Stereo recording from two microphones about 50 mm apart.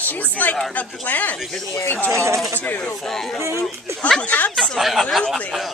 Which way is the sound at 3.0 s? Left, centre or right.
Centre.